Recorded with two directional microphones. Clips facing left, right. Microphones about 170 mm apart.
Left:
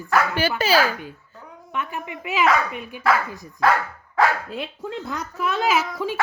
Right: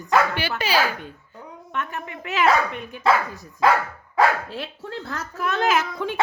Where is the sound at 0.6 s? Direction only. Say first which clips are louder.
Left 3 dB; 40° left (ahead or behind).